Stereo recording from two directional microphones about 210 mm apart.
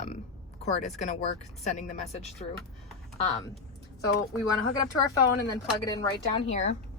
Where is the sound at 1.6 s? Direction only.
35° left (ahead or behind).